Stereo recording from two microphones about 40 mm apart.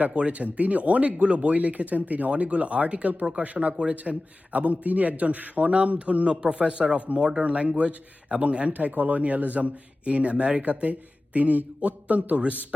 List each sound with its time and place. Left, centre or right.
0.1 s a man's voice: right
7.4 s a man's voice: right